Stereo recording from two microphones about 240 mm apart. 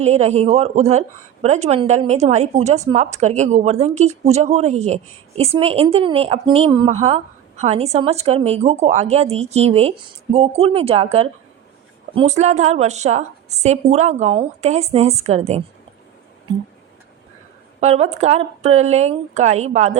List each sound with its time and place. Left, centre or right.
0.0 s speech: right
17.7 s speech: right